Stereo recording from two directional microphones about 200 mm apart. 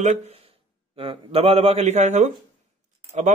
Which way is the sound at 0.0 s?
30° right (ahead or behind).